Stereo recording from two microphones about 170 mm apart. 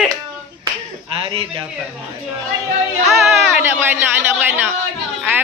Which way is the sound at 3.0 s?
Centre (ahead or behind).